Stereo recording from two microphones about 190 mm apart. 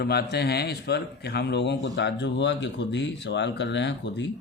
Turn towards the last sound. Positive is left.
turn(degrees=70)  # may be behind; listen again after turning